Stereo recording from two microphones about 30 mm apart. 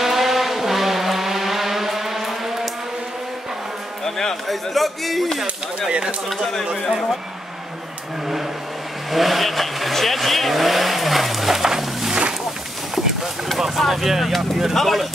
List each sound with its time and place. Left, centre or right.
0.0 s vehicle: centre
4.0 s music: centre
4.5 s speech: centre
9.1 s speech: centre
12.1 s wild animals: right
13.7 s speech: centre